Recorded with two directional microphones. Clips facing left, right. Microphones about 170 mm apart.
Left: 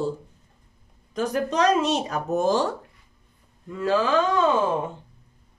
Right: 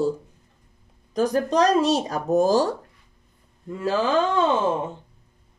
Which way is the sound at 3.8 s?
35° right (ahead or behind).